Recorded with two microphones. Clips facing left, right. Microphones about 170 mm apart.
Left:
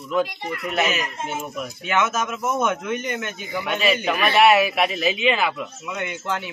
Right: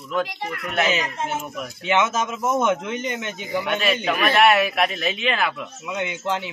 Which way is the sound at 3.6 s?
Centre (ahead or behind).